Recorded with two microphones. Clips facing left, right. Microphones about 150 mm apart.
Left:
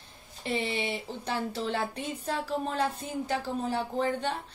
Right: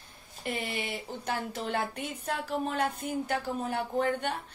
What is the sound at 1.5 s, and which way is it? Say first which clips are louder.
A woman's voice: left 1 dB; 30° left (ahead or behind).